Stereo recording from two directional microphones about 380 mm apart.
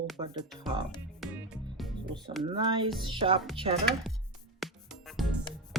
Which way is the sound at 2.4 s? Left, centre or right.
Centre.